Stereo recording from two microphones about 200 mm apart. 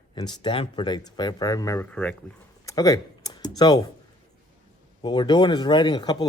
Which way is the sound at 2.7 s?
20° left (ahead or behind).